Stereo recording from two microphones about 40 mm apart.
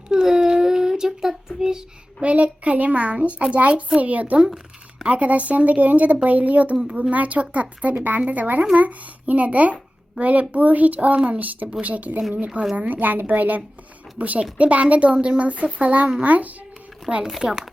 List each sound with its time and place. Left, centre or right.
0.1 s child singing: centre
2.2 s speech: right
9.7 s a sound: right
10.5 s speech: right
17.1 s speech: centre